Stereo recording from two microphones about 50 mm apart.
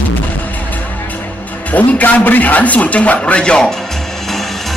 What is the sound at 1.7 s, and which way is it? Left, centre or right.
A man's voice, left.